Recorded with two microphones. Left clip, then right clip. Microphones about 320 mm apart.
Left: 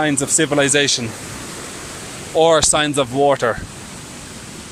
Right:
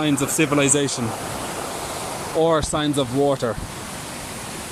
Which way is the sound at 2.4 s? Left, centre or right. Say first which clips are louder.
Left 6 dB; left.